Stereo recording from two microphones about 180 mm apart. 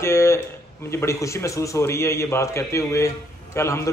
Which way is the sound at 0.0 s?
15° left (ahead or behind).